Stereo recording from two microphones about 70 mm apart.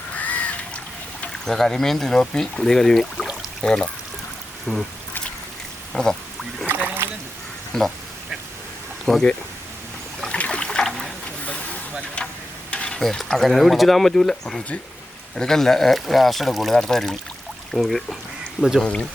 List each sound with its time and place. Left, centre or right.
0.2 s crow: left
1.5 s speech: centre
4.7 s speech: centre
5.9 s speech: centre
6.7 s rowboat: right
7.7 s speech: centre
9.0 s speech: centre
10.2 s a sound: centre
11.4 s vehicle: centre
12.7 s mechanisms: centre
13.0 s speech: centre
18.8 s speech: centre